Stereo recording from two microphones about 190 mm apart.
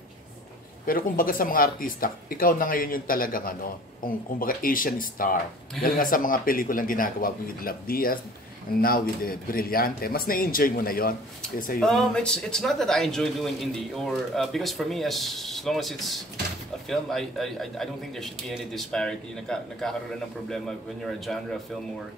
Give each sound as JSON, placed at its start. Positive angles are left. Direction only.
{"t": 0.8, "sound": "speech", "side_deg": 50}
{"t": 11.8, "sound": "a man's voice", "side_deg": 5}